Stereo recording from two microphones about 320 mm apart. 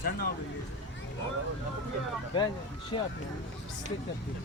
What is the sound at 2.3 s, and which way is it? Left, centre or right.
Speech, centre.